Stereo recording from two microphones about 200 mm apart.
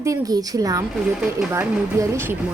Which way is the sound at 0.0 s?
15° right (ahead or behind).